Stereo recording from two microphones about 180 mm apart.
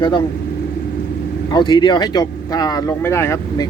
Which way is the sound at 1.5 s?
25° left (ahead or behind).